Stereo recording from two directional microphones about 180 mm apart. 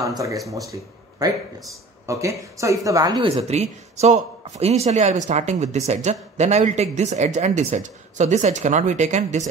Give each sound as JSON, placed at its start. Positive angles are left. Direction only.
{"t": 0.5, "sound": "speech", "side_deg": -15}
{"t": 2.0, "sound": "speech", "side_deg": -15}
{"t": 3.3, "sound": "speech", "side_deg": -35}